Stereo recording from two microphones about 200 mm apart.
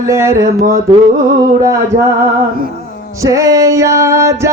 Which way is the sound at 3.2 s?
15° right (ahead or behind).